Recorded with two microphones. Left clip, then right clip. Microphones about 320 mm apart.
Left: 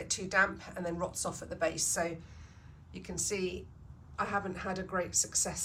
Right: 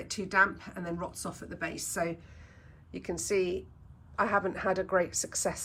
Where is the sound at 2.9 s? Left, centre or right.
Right.